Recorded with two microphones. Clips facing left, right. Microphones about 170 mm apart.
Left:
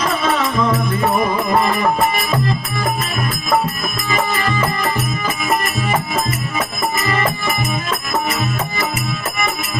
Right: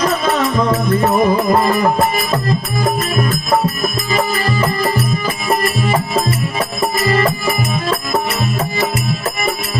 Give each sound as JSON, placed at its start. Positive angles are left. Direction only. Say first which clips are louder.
{"t": 1.2, "sound": "music", "louder": "right 4 dB", "side_deg": -35}
{"t": 4.1, "sound": "music", "louder": "even", "side_deg": -35}